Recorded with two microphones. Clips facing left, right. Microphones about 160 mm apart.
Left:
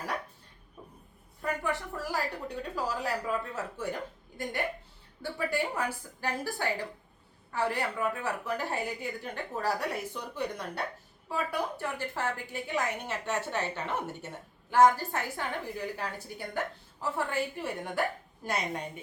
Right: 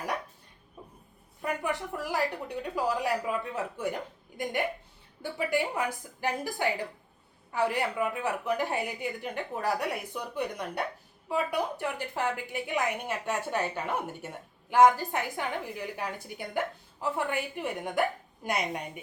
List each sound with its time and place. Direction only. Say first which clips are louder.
1.4 s a woman's voice: right 1 dB; 15° right (ahead or behind)
5.2 s a woman's voice: right 2 dB; 15° right (ahead or behind)